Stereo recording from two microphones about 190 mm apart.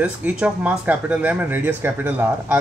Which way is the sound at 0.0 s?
5° right (ahead or behind).